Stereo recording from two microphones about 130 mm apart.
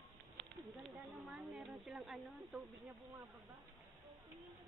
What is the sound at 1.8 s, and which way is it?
Speech, centre (ahead or behind).